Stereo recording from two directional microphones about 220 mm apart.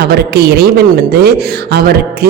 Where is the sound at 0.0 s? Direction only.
45° right (ahead or behind).